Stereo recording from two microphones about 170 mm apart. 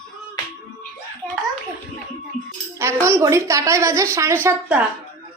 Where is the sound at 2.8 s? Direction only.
15° right (ahead or behind).